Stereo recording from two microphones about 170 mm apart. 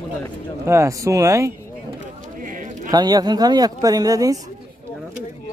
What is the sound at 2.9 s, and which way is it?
Speech, 25° right (ahead or behind).